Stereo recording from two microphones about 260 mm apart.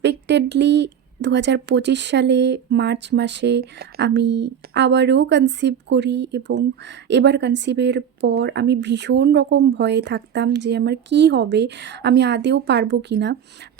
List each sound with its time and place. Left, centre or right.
0.0 s speech: right